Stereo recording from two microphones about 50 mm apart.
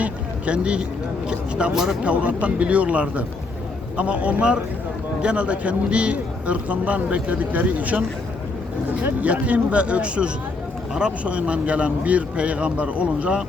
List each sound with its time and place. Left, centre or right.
0.0 s speech: right
2.0 s speech: right
9.2 s speech: right